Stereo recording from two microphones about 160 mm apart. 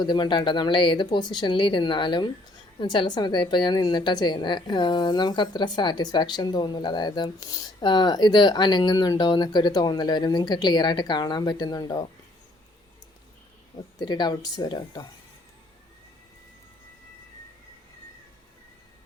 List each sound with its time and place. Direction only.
0.0 s a woman's voice: 30° left (ahead or behind)
14.0 s a woman's voice: 25° left (ahead or behind)